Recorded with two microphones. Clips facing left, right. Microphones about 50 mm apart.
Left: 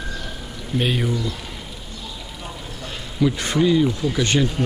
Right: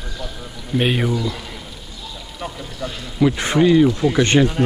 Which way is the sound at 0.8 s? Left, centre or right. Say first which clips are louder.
Right 3 dB; right.